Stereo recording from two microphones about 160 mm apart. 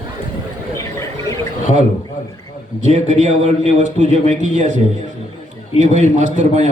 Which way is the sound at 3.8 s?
50° right (ahead or behind).